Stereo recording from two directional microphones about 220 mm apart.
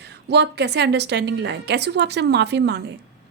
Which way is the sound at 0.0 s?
50° right (ahead or behind).